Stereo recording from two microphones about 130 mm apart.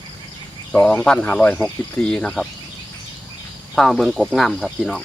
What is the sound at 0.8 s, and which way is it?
Speech, 10° left (ahead or behind).